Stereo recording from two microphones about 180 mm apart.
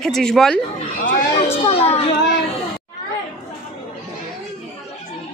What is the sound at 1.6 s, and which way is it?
Children playing, 35° left (ahead or behind).